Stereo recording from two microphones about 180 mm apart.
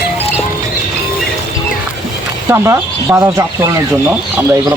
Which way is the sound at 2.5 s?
15° right (ahead or behind).